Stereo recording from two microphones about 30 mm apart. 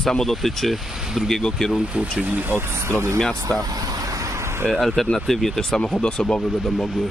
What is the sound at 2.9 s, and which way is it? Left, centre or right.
Speech, left.